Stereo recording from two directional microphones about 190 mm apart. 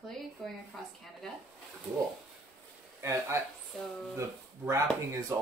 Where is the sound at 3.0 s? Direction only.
15° right (ahead or behind).